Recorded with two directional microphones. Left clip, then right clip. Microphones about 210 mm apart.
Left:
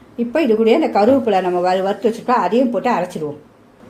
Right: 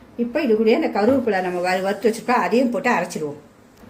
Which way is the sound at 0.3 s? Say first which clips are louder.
Left 4 dB; 30° left (ahead or behind).